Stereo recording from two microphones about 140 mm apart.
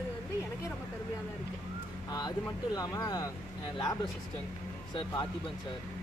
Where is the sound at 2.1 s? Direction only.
30° left (ahead or behind).